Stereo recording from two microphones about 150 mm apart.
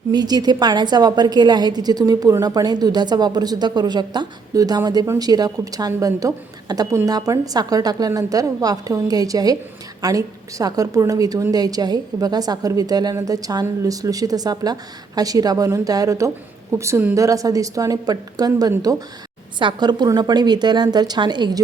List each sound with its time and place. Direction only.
0.1 s a woman's voice: 25° right (ahead or behind)